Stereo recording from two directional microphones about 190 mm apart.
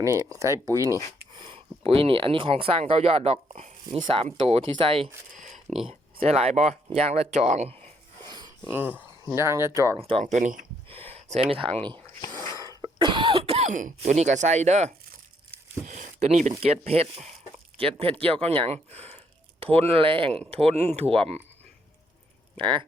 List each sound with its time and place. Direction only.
0.0 s speech: 15° right (ahead or behind)
5.3 s a sound: 45° right (ahead or behind)
5.8 s speech: 30° right (ahead or behind)
8.6 s speech: 10° right (ahead or behind)
10.0 s speech: 30° right (ahead or behind)
12.4 s sneeze: 20° left (ahead or behind)
12.6 s speech: 25° right (ahead or behind)
22.5 s speech: 25° right (ahead or behind)